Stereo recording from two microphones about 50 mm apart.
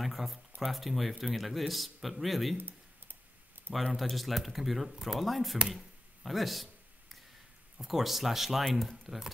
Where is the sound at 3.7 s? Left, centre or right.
Right.